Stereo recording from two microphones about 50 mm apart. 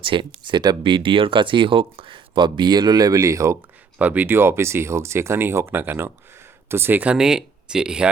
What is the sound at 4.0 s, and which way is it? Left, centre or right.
Speech, right.